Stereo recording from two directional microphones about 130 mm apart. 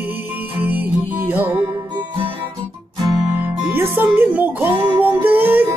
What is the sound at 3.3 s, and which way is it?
Speech, 15° right (ahead or behind).